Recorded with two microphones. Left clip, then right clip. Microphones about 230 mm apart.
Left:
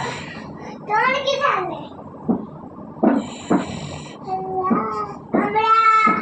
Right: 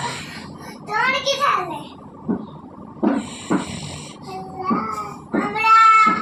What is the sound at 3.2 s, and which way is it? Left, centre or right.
Music, right.